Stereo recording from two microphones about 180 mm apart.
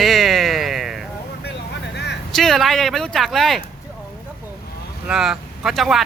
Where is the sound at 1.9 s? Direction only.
70° left (ahead or behind).